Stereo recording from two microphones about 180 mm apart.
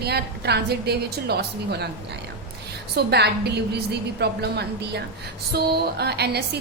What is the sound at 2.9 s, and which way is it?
A woman's voice, 65° right (ahead or behind).